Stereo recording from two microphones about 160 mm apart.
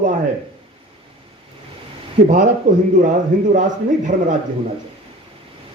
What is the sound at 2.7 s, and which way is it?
A man's voice, 50° right (ahead or behind).